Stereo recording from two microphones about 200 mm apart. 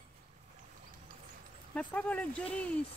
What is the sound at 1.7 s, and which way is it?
Speech, 10° left (ahead or behind).